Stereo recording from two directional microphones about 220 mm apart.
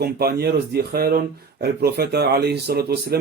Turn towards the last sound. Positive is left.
turn(degrees=-45)  # may be behind; listen again after turning